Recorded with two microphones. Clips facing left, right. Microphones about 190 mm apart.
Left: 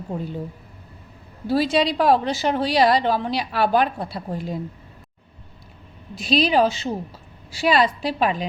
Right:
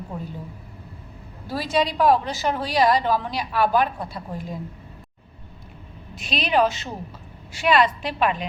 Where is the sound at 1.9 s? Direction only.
30° left (ahead or behind).